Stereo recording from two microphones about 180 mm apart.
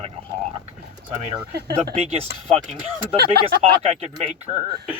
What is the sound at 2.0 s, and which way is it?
Speech, 35° right (ahead or behind).